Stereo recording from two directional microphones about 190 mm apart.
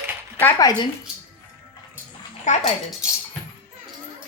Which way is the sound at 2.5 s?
40° left (ahead or behind).